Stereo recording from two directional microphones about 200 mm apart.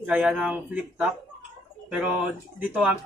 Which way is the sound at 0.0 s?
5° right (ahead or behind).